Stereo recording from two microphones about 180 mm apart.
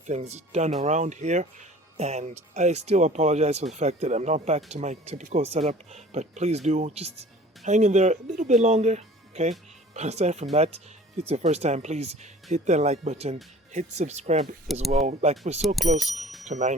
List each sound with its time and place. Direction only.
0.1 s speech: 40° right (ahead or behind)
14.7 s speech: centre (ahead or behind)
15.0 s speech: 40° right (ahead or behind)
15.6 s speech: centre (ahead or behind)
16.0 s speech: 40° right (ahead or behind)